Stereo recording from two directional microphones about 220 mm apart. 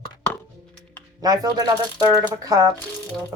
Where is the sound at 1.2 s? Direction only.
15° right (ahead or behind).